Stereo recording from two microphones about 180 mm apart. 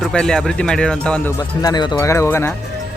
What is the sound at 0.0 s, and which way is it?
Speech, 5° left (ahead or behind).